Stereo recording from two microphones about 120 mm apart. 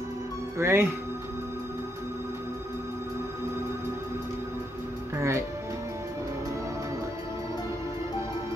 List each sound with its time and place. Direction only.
0.6 s speech: 20° right (ahead or behind)
5.1 s music: 25° right (ahead or behind)